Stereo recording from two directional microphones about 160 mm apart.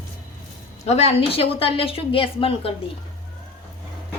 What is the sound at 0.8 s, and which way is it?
A woman's voice, 40° left (ahead or behind).